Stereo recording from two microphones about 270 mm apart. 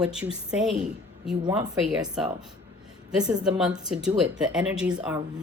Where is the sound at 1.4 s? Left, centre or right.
Centre.